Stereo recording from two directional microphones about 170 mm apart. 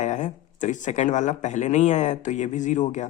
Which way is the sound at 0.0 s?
45° left (ahead or behind).